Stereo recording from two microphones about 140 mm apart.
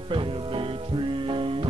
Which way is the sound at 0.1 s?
40° right (ahead or behind).